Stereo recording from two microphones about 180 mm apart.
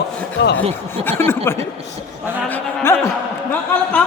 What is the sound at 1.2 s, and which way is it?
Speech, 15° left (ahead or behind).